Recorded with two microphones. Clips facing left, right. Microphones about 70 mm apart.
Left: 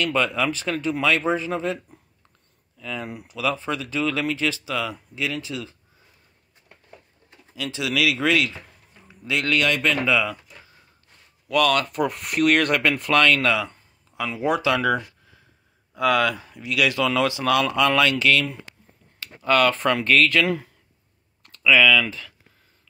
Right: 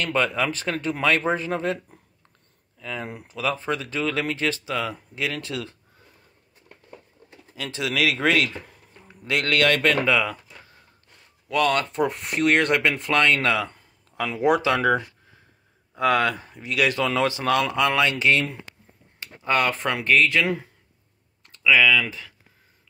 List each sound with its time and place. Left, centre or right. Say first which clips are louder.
0.0 s speech: left 1 dB; right
2.8 s speech: left 1 dB; right
5.4 s speech: right 1 dB; right
7.5 s speech: left 1 dB; right
9.3 s speech: right 1 dB; right
11.4 s speech: left 2 dB; right; by 22.3 s centre